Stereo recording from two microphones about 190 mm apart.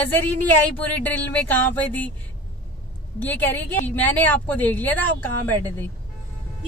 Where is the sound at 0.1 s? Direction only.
10° left (ahead or behind).